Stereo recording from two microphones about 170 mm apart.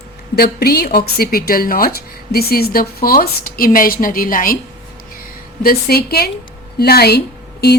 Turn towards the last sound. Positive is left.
turn(degrees=70)  # may be behind; listen again after turning